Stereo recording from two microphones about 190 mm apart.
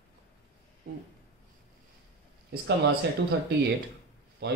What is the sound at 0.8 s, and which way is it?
Speech, 55° right (ahead or behind).